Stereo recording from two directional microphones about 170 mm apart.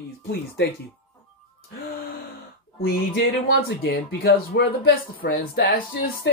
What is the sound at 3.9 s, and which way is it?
Speech, 65° left (ahead or behind).